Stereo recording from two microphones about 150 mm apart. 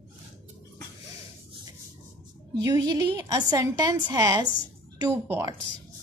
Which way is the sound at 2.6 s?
25° right (ahead or behind).